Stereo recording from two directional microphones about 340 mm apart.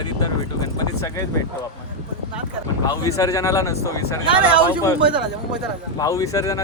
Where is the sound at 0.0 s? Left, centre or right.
Centre.